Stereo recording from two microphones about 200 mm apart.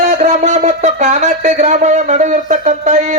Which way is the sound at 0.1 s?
35° right (ahead or behind).